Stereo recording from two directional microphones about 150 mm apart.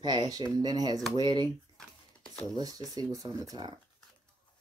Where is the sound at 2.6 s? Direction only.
25° right (ahead or behind).